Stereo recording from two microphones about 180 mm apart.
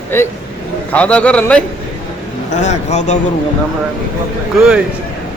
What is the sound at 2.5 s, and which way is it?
Speech, 40° left (ahead or behind).